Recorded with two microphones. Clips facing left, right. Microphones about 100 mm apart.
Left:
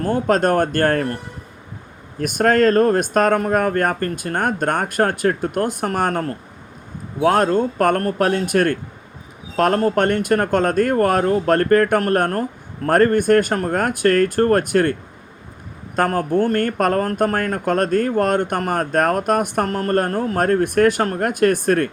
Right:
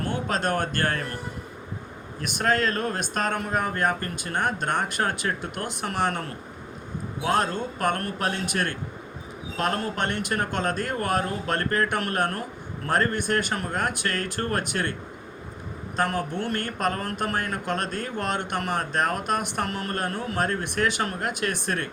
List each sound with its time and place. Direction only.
0.0 s speech: 45° left (ahead or behind)
2.2 s speech: 50° left (ahead or behind)
16.0 s speech: 45° left (ahead or behind)